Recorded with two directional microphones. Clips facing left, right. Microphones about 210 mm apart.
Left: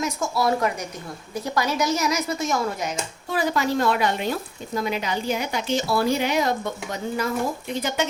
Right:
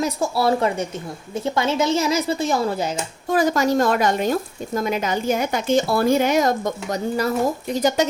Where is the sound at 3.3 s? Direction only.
45° right (ahead or behind).